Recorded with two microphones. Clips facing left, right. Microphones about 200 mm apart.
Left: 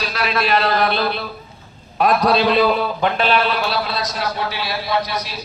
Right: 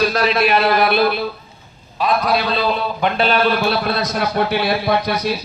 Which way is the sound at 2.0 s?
45° left (ahead or behind).